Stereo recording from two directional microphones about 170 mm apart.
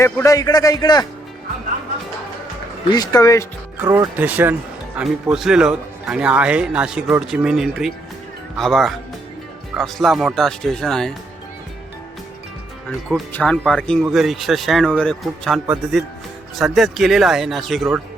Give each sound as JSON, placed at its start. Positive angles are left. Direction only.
{"t": 0.0, "sound": "a man's voice", "side_deg": 20}
{"t": 2.9, "sound": "a man's voice", "side_deg": 20}
{"t": 3.8, "sound": "speech", "side_deg": -20}
{"t": 4.2, "sound": "a man's voice", "side_deg": -10}
{"t": 13.3, "sound": "a man's voice", "side_deg": 5}